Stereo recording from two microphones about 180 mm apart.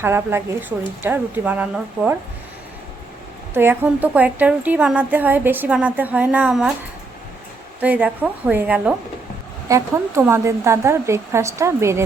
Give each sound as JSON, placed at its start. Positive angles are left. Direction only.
{"t": 0.0, "sound": "a woman's voice", "side_deg": -10}
{"t": 3.5, "sound": "a woman's voice", "side_deg": -10}
{"t": 7.8, "sound": "a woman's voice", "side_deg": -10}